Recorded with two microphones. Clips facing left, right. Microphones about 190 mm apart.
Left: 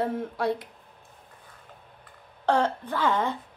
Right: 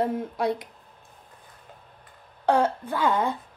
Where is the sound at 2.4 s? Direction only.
10° right (ahead or behind).